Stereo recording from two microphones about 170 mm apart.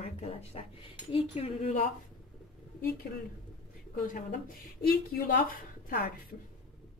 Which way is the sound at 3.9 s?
55° left (ahead or behind).